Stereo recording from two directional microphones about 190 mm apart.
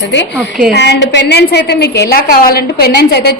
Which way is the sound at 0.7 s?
65° left (ahead or behind).